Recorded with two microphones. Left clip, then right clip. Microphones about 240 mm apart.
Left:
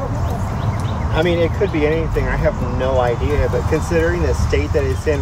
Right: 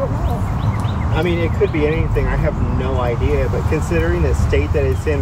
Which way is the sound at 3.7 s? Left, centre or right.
Centre.